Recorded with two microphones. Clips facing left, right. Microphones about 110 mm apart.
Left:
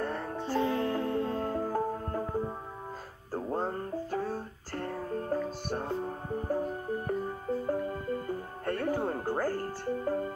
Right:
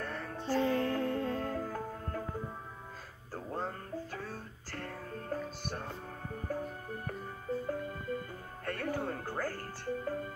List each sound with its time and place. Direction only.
0.0 s music: 30° left (ahead or behind)